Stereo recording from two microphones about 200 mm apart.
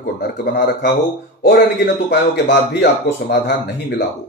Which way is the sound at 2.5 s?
60° left (ahead or behind).